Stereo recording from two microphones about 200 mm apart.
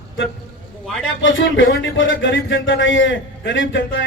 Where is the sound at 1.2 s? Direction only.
70° left (ahead or behind).